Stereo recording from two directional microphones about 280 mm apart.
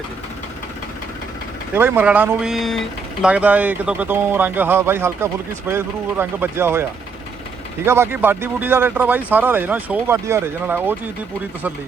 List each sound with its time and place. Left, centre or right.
1.7 s speech: centre
7.9 s speech: centre